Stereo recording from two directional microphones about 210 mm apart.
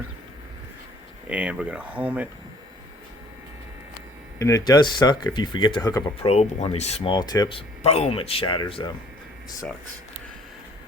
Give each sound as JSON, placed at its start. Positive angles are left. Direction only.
{"t": 1.3, "sound": "speech", "side_deg": -5}
{"t": 4.4, "sound": "speech", "side_deg": 15}
{"t": 6.2, "sound": "speech", "side_deg": 30}